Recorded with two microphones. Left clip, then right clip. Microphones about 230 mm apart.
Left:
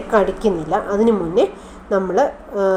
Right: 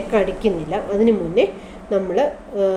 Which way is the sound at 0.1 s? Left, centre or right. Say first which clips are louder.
Left 3 dB; left.